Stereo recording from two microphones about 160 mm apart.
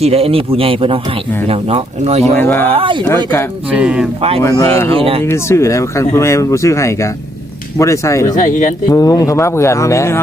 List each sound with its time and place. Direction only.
0.0 s speech: 40° right (ahead or behind)
2.3 s speech: 10° left (ahead or behind)
2.7 s speech: 30° right (ahead or behind)
3.7 s speech: 5° right (ahead or behind)
4.2 s speech: 40° right (ahead or behind)
4.4 s speech: 20° left (ahead or behind)
4.9 s speech: 35° right (ahead or behind)
5.2 s speech: 15° left (ahead or behind)
8.4 s speech: 50° left (ahead or behind)
8.9 s speech: 20° left (ahead or behind)